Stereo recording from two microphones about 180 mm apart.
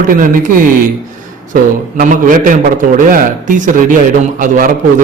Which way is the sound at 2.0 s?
45° right (ahead or behind).